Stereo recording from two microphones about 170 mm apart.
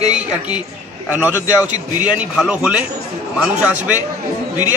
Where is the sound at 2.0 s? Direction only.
5° right (ahead or behind).